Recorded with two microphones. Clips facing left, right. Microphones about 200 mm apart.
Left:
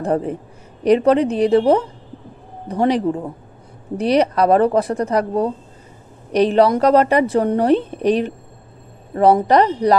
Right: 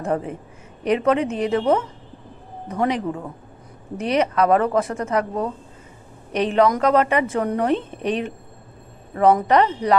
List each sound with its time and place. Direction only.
0.0 s a woman's voice: 35° left (ahead or behind)